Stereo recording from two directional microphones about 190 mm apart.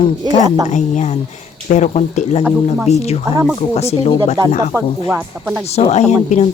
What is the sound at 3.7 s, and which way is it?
Speech, 35° left (ahead or behind).